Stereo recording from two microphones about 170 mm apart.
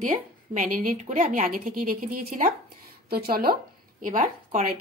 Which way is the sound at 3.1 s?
65° right (ahead or behind).